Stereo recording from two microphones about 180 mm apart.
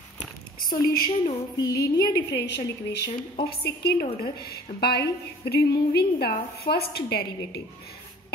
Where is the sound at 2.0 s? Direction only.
65° left (ahead or behind).